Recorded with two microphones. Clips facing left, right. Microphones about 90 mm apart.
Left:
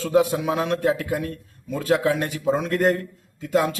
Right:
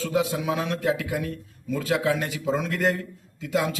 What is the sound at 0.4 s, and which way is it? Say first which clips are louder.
A man's voice: left 3 dB; 45° left (ahead or behind).